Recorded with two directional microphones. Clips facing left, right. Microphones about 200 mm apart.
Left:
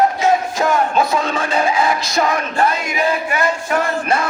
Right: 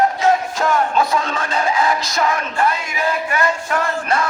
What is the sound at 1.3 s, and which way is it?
Music, 10° left (ahead or behind).